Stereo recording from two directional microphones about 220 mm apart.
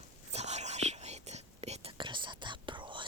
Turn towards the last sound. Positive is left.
turn(degrees=-20)  # may be behind; listen again after turning